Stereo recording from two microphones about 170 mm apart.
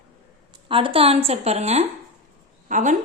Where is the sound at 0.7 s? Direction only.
30° right (ahead or behind).